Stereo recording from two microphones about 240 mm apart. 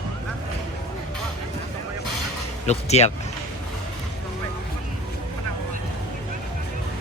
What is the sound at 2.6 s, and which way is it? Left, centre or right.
Speech, left.